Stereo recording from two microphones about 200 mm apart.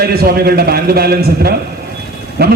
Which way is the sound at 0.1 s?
50° right (ahead or behind).